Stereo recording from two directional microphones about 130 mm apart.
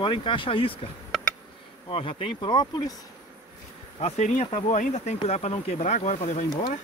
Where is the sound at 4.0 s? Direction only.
55° left (ahead or behind).